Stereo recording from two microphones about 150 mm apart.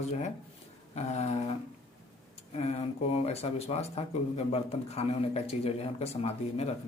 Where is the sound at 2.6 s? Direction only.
45° left (ahead or behind).